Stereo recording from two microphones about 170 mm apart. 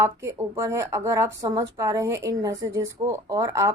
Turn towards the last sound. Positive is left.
turn(degrees=-20)  # may be behind; listen again after turning